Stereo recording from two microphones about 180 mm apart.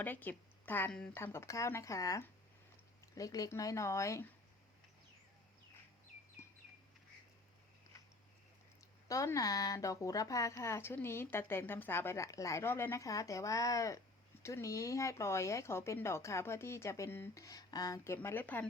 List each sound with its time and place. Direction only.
0.0 s speech: 10° left (ahead or behind)
9.0 s speech: 20° left (ahead or behind)